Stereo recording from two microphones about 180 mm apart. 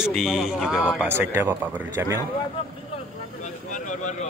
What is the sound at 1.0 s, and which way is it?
Speech, 15° right (ahead or behind).